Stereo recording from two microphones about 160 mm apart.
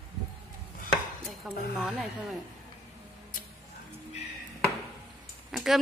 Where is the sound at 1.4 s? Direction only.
Centre (ahead or behind).